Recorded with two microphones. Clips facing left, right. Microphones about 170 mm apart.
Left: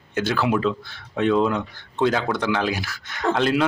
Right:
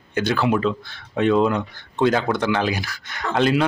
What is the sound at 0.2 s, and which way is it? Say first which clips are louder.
Speech: right 1 dB; 5° left (ahead or behind).